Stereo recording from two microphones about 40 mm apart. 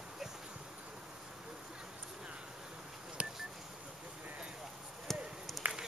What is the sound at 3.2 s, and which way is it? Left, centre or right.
Telephone dialing, right.